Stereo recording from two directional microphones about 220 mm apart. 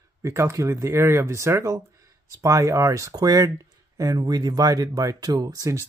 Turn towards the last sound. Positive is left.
turn(degrees=-15)  # may be behind; listen again after turning